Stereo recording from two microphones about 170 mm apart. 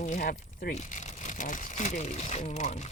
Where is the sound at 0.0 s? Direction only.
50° left (ahead or behind).